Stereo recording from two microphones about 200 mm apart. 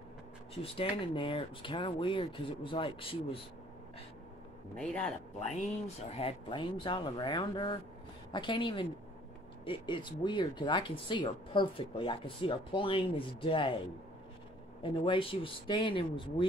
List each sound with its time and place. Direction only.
0.6 s speech: 30° left (ahead or behind)
4.7 s speech: 5° left (ahead or behind)
5.5 s speech: 35° left (ahead or behind)
14.8 s speech: 25° left (ahead or behind)